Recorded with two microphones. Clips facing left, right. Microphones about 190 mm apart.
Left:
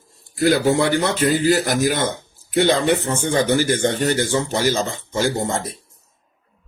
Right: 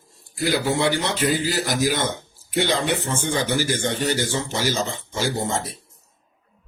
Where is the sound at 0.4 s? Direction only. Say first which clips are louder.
Left 5 dB; 55° left (ahead or behind).